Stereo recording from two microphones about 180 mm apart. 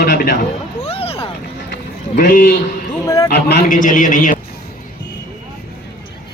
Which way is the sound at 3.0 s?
20° left (ahead or behind).